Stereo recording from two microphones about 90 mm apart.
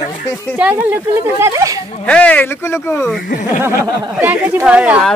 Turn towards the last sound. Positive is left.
turn(degrees=-15)  # may be behind; listen again after turning